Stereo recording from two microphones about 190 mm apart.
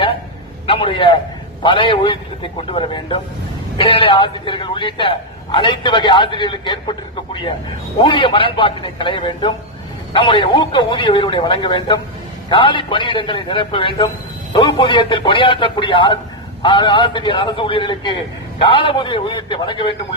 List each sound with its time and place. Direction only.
0.7 s a man's voice: 25° left (ahead or behind)
7.9 s a man's voice: 25° left (ahead or behind)